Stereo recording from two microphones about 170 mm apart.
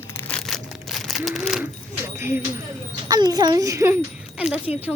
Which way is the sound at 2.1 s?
15° right (ahead or behind).